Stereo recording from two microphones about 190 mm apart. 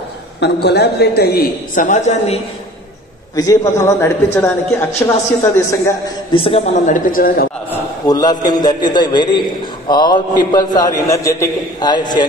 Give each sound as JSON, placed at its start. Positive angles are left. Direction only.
{"t": 0.4, "sound": "a man's voice", "side_deg": 60}
{"t": 3.3, "sound": "a man's voice", "side_deg": 15}
{"t": 6.3, "sound": "a man's voice", "side_deg": 30}
{"t": 7.7, "sound": "a man's voice", "side_deg": 20}